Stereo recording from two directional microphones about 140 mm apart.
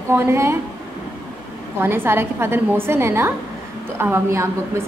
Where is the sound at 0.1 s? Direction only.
20° right (ahead or behind).